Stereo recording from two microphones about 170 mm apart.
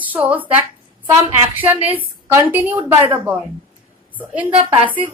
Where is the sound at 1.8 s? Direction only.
10° right (ahead or behind).